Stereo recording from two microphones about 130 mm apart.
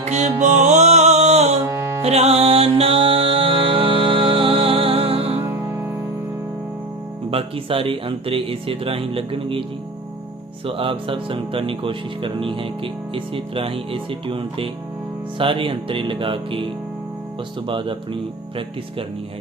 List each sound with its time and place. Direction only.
0.0 s music: 60° right (ahead or behind)
5.5 s music: 15° right (ahead or behind)
7.3 s speech: 45° right (ahead or behind)
10.7 s speech: 45° right (ahead or behind)
17.7 s speech: 40° right (ahead or behind)